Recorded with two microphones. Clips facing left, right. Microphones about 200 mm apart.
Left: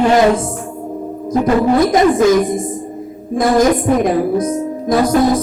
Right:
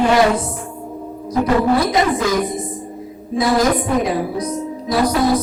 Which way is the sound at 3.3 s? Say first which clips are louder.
Left 4 dB; 50° left (ahead or behind).